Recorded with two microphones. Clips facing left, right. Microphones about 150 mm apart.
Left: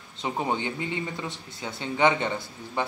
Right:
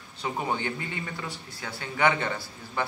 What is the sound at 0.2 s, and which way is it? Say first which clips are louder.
Speech: left 2 dB; 20° left (ahead or behind).